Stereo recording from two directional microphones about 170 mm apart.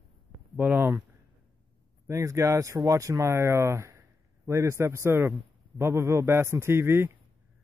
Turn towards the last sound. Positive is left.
turn(degrees=-15)  # may be behind; listen again after turning